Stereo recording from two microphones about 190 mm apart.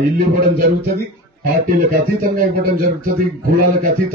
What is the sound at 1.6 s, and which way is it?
A man's voice, 45° right (ahead or behind).